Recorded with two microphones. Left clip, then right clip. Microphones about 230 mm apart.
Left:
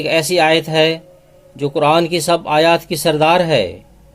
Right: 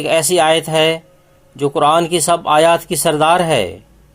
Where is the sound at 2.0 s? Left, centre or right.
Centre.